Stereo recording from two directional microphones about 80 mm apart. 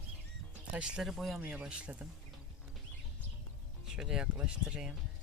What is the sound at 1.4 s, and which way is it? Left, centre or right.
Speech, centre.